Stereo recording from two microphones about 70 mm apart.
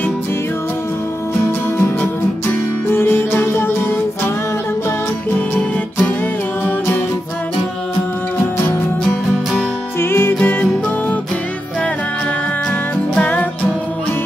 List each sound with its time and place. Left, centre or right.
1.3 s music: left
2.9 s music: left
9.9 s music: left
13.1 s music: left